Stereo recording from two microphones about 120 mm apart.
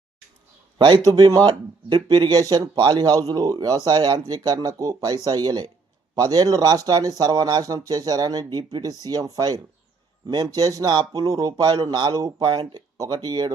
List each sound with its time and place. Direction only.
0.8 s speech: 40° right (ahead or behind)